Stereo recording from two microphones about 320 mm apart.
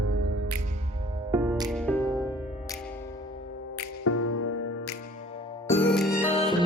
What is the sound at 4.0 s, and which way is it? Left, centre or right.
Music, left.